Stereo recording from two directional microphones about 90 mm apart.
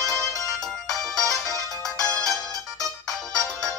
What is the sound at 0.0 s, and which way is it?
Music, 40° right (ahead or behind).